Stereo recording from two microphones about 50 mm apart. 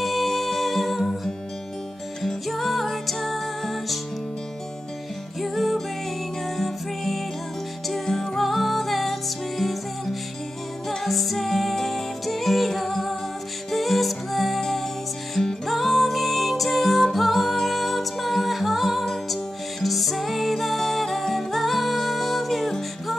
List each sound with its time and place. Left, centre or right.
0.0 s music: centre
5.4 s music: centre
10.9 s music: centre